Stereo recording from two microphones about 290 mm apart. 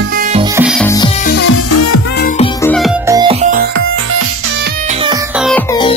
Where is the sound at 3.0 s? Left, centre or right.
Centre.